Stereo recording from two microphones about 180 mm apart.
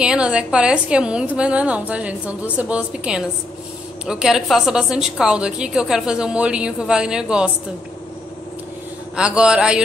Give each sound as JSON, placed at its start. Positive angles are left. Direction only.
{"t": 0.0, "sound": "a woman's voice", "side_deg": -5}
{"t": 9.1, "sound": "a woman's voice", "side_deg": -5}